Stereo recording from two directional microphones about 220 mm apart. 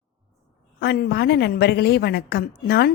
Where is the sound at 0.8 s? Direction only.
45° left (ahead or behind).